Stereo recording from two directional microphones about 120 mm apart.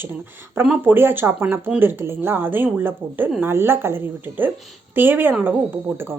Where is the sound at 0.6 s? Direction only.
10° right (ahead or behind).